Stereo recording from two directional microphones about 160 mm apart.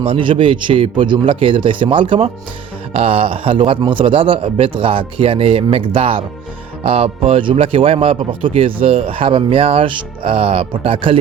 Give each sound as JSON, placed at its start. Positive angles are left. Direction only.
{"t": 0.0, "sound": "speech", "side_deg": -30}